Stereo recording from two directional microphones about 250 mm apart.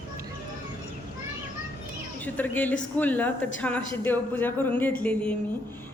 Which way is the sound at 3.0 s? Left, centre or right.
Centre.